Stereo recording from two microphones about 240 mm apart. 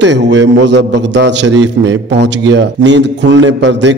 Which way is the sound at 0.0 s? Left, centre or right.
Right.